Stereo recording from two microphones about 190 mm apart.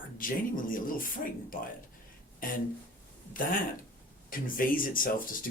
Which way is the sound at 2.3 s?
45° left (ahead or behind).